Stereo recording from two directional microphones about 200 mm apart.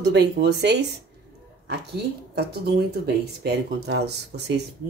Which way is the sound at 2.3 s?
55° right (ahead or behind).